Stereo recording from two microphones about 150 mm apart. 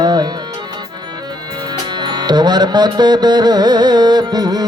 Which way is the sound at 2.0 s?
30° right (ahead or behind).